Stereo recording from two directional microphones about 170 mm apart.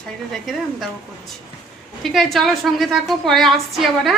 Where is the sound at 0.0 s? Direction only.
5° left (ahead or behind).